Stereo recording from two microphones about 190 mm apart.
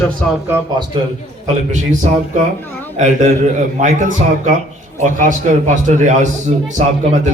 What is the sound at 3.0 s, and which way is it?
A man's voice, 40° right (ahead or behind).